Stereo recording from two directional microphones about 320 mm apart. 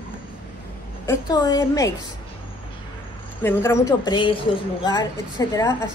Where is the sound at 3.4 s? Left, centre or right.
Centre.